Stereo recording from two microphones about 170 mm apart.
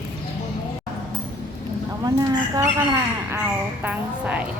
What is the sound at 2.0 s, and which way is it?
Speech, 20° right (ahead or behind).